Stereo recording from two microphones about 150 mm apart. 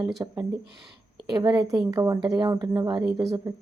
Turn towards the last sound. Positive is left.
turn(degrees=-20)  # may be behind; listen again after turning